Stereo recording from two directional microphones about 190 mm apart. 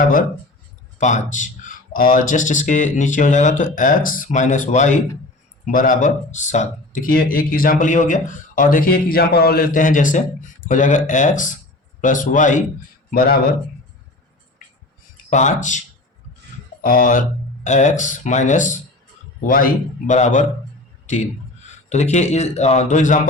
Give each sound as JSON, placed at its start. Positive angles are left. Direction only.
{"t": 0.9, "sound": "speech", "side_deg": 40}
{"t": 15.3, "sound": "speech", "side_deg": 40}
{"t": 16.8, "sound": "speech", "side_deg": 50}
{"t": 21.8, "sound": "speech", "side_deg": 35}